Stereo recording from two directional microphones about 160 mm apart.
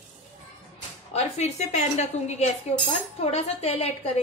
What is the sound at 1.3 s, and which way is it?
A woman's voice, 45° left (ahead or behind).